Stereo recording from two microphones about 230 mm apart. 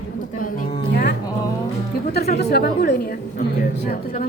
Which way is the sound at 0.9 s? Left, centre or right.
Left.